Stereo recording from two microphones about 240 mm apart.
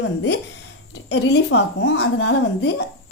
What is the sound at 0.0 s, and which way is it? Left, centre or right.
A woman's voice, left.